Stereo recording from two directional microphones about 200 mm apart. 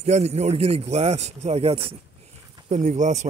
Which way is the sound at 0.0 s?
35° right (ahead or behind).